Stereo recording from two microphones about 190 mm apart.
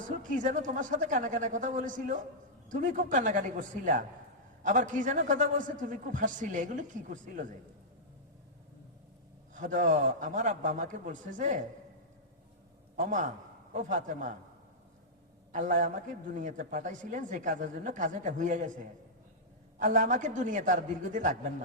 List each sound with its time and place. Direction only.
0.2 s a man's voice: 45° right (ahead or behind)
9.6 s a man's voice: 40° right (ahead or behind)
13.0 s a man's voice: 40° right (ahead or behind)
15.5 s a man's voice: 40° right (ahead or behind)
19.8 s a man's voice: 40° right (ahead or behind)